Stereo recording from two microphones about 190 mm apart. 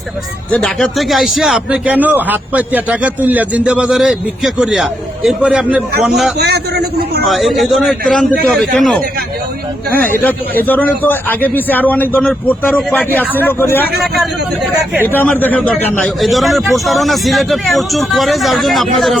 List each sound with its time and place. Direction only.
0.5 s a man's voice: 5° left (ahead or behind)
6.4 s a man's voice: 60° right (ahead or behind)
7.3 s a man's voice: centre (ahead or behind)
10.2 s a man's voice: 10° left (ahead or behind)
15.1 s a man's voice: 10° left (ahead or behind)